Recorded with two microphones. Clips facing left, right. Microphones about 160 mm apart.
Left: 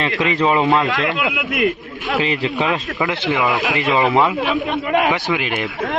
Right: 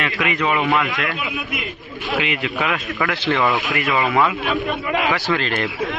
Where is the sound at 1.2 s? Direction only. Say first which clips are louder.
Left 8 dB; 65° left (ahead or behind).